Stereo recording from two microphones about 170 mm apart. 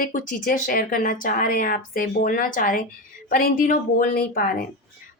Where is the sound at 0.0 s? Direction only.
55° left (ahead or behind).